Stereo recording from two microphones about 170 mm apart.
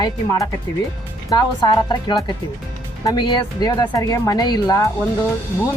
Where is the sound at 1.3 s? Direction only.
25° left (ahead or behind).